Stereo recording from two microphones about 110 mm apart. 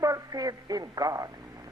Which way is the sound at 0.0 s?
30° right (ahead or behind).